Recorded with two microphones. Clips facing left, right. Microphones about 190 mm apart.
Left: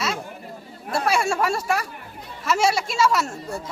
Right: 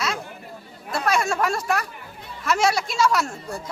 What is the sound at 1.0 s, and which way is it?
A woman's voice, 10° left (ahead or behind).